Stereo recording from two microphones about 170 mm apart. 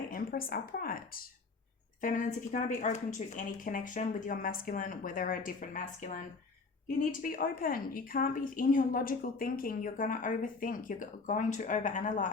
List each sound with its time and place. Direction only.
0.1 s a woman's voice: 55° left (ahead or behind)